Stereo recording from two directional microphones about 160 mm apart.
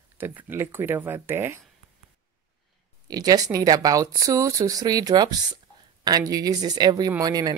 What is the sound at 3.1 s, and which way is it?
Speech, 25° right (ahead or behind).